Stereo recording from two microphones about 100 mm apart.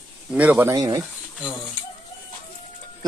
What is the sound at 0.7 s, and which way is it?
Speech, 40° right (ahead or behind).